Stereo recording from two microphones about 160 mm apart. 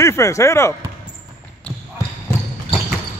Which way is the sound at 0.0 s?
20° left (ahead or behind).